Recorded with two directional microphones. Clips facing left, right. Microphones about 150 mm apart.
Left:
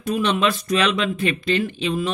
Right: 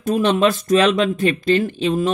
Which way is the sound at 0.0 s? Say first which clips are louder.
Right 4 dB; 45° right (ahead or behind).